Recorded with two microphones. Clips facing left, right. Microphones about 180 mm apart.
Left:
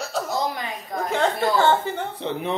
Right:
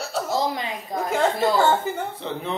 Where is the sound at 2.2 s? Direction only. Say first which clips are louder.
Left 3 dB; 15° left (ahead or behind).